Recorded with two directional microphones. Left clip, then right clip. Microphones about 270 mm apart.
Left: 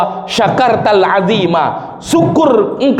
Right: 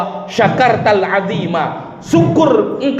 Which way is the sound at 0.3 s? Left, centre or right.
Left.